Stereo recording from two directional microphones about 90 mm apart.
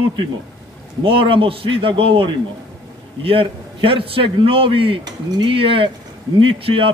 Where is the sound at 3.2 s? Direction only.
85° right.